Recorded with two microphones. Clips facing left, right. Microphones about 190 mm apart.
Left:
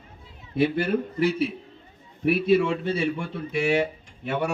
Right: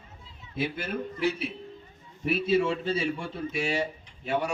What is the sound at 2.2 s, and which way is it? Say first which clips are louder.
Speech: left 4 dB; 65° left (ahead or behind).